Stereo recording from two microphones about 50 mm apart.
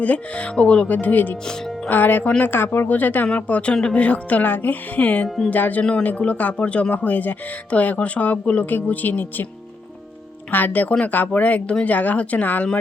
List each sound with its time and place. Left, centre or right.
0.0 s speech: left
0.9 s speech: left
5.8 s speech: left
10.5 s speech: left